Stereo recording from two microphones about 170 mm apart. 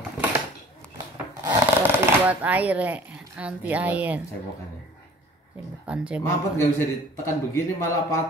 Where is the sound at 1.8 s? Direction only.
10° right (ahead or behind).